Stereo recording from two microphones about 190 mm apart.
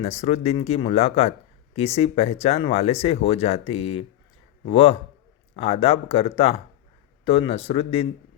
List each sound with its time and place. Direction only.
0.0 s speech: 35° left (ahead or behind)